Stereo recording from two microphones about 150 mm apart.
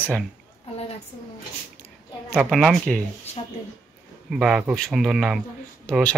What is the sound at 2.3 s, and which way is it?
Speech, centre (ahead or behind).